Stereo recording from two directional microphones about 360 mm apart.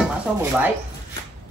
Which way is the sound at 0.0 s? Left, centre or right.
Centre.